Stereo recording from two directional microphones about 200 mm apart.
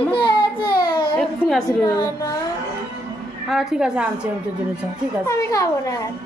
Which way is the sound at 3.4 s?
Centre (ahead or behind).